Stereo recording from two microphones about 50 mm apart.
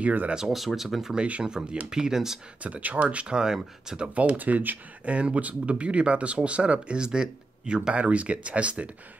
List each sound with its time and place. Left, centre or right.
0.0 s speech: right
0.7 s speech: centre
1.1 s speech: right
1.4 s speech: centre
2.6 s speech: right; by 4.1 s centre
4.1 s speech: right